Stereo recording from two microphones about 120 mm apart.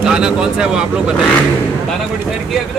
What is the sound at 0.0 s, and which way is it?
Speech, 5° right (ahead or behind).